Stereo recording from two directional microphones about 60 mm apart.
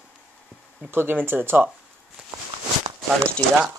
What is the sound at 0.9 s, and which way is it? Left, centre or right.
Speech, right.